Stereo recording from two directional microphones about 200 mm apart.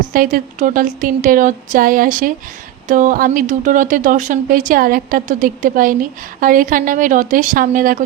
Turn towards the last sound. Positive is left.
turn(degrees=-45)  # may be behind; listen again after turning